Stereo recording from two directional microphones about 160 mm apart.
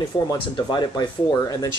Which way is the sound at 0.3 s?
30° left (ahead or behind).